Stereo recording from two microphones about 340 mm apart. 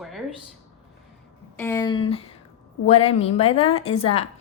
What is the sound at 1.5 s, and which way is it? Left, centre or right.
Speech, centre.